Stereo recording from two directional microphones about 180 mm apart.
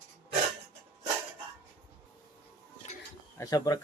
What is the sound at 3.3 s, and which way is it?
Speech, 20° left (ahead or behind).